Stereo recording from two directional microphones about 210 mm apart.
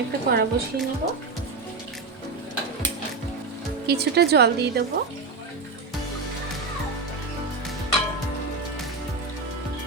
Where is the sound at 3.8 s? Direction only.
50° right (ahead or behind).